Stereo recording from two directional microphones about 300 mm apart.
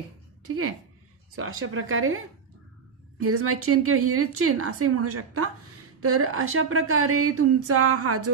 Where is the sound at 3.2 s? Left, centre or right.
Right.